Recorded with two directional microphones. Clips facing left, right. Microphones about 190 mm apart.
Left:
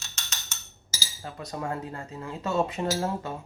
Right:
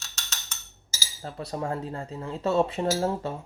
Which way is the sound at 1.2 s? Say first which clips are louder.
Right 3 dB; 30° right (ahead or behind).